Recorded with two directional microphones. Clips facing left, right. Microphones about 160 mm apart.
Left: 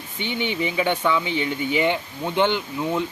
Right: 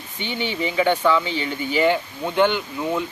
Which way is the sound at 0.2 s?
20° left (ahead or behind).